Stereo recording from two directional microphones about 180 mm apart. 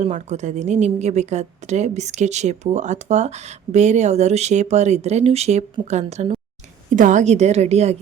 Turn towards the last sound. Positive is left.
turn(degrees=-35)  # may be behind; listen again after turning